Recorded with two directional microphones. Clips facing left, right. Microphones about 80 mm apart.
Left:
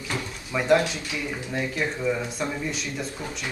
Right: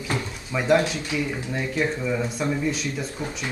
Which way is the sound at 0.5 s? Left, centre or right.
Centre.